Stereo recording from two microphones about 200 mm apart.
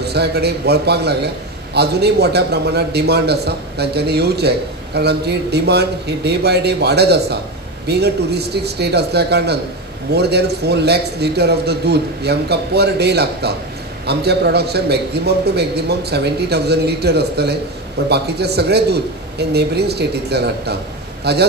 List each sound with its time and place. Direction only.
0.0 s a man's voice: 55° right (ahead or behind)